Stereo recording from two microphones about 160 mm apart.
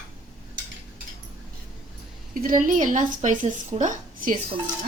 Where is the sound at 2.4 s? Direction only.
55° right (ahead or behind).